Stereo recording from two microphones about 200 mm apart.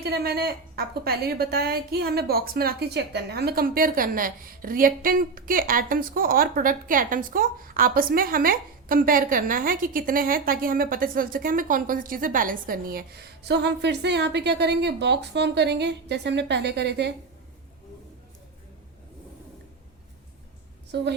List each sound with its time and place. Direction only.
0.0 s a woman's voice: 50° right (ahead or behind)
20.9 s a woman's voice: 60° right (ahead or behind)